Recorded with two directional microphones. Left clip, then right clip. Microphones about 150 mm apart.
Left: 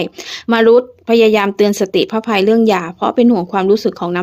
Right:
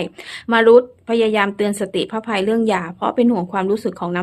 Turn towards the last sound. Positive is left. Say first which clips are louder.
# left 6 dB
turn(degrees=40)  # may be behind; listen again after turning